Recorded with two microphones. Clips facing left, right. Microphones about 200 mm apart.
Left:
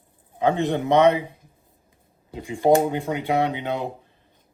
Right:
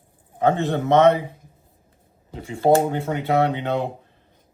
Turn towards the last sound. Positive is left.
turn(degrees=10)  # may be behind; listen again after turning